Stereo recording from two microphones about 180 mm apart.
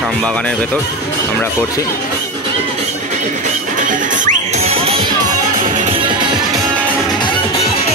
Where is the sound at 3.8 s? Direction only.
45° right (ahead or behind).